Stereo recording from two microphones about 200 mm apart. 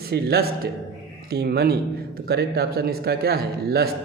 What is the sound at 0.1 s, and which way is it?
A man's voice, 50° right (ahead or behind).